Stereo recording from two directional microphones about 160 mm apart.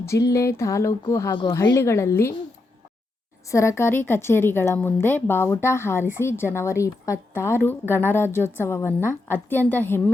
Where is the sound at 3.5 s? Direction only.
20° left (ahead or behind).